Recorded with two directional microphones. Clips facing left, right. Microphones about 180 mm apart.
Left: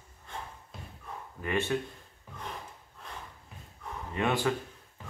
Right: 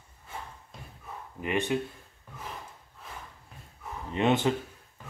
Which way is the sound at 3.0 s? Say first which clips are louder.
Even; 5° right (ahead or behind).